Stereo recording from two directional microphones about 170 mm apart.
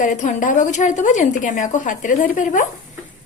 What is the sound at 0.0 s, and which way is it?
A woman's voice, 45° left (ahead or behind).